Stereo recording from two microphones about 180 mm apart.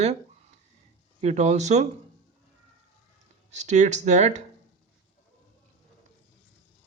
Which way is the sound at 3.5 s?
40° right (ahead or behind).